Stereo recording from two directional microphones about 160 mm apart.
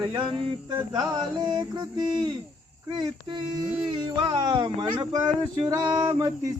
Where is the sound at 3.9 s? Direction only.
30° right (ahead or behind).